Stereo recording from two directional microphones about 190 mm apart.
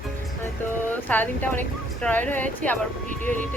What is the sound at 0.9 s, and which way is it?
A woman's voice, 10° left (ahead or behind).